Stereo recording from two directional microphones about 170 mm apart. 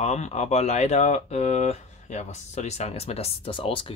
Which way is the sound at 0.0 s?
40° left (ahead or behind).